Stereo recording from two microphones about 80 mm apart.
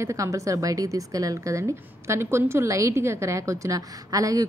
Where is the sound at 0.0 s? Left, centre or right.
Right.